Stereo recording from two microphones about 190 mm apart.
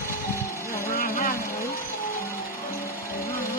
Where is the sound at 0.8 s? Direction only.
50° left (ahead or behind).